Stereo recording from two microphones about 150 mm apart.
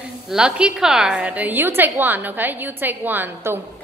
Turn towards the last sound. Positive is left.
turn(degrees=-15)  # may be behind; listen again after turning